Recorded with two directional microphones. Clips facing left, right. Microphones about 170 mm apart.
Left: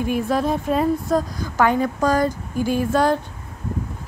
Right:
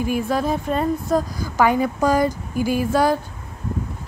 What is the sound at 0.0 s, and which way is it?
A woman's voice, centre (ahead or behind).